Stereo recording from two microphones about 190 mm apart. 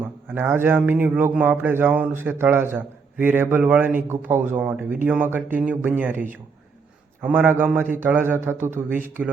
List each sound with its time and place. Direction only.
0.0 s a man's voice: 10° right (ahead or behind)